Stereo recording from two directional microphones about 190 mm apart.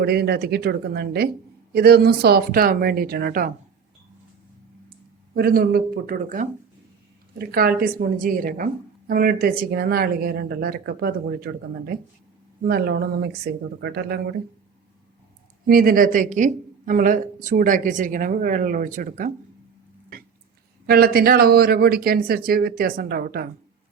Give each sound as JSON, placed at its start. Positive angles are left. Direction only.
{"t": 0.0, "sound": "a woman's voice", "side_deg": -60}
{"t": 5.3, "sound": "a woman's voice", "side_deg": -50}
{"t": 12.6, "sound": "speech", "side_deg": -55}
{"t": 15.6, "sound": "a woman's voice", "side_deg": -50}
{"t": 20.8, "sound": "a woman's voice", "side_deg": -55}